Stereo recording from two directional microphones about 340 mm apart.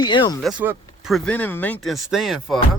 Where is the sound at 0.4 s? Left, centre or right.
Centre.